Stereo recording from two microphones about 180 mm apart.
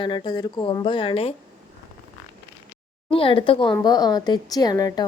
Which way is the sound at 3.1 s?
30° left (ahead or behind).